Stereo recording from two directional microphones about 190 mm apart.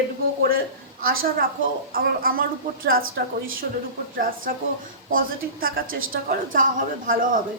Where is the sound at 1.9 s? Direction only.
50° right (ahead or behind).